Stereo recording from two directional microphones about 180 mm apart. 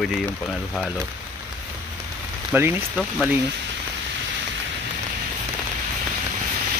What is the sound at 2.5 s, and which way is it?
Speech, 10° right (ahead or behind).